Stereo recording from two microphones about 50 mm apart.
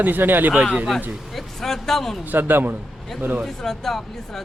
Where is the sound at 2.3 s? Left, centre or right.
Right.